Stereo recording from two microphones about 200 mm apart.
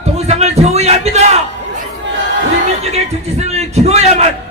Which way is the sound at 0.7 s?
30° right (ahead or behind).